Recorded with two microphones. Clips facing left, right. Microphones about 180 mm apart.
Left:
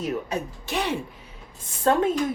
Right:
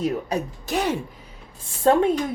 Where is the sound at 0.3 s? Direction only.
40° right (ahead or behind).